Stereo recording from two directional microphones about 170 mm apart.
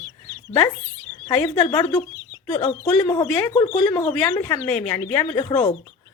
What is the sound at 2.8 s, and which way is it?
Speech, 20° left (ahead or behind).